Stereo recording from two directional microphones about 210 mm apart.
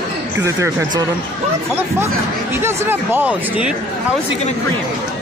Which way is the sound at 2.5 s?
10° right (ahead or behind).